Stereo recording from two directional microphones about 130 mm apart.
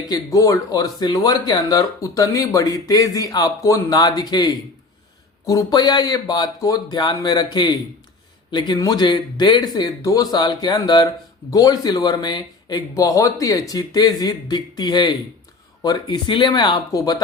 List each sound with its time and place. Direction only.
0.1 s speech: 25° left (ahead or behind)